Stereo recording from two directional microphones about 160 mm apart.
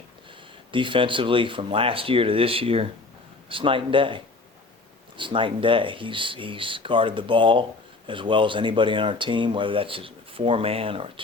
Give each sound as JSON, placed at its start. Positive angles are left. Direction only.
{"t": 0.7, "sound": "speech", "side_deg": -30}